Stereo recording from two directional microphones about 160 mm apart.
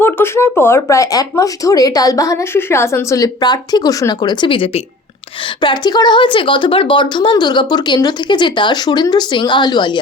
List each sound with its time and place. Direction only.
0.0 s speech: 15° left (ahead or behind)